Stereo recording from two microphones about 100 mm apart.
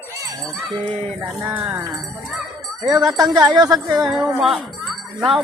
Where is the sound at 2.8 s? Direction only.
40° right (ahead or behind).